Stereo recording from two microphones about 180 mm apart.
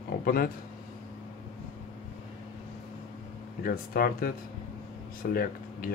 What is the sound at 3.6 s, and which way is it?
Speech, 55° left (ahead or behind).